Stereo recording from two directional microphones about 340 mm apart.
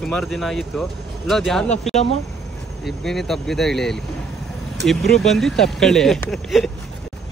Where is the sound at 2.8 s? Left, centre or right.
Centre.